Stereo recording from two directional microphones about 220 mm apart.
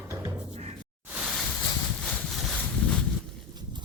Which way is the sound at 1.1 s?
Centre (ahead or behind).